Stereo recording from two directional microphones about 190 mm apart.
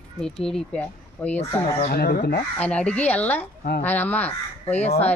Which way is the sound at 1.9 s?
55° left (ahead or behind).